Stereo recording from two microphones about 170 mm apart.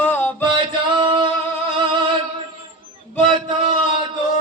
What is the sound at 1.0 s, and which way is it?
Singing, 30° right (ahead or behind).